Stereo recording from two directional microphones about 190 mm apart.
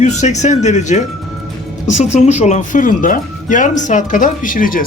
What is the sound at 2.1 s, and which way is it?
Speech, 35° left (ahead or behind).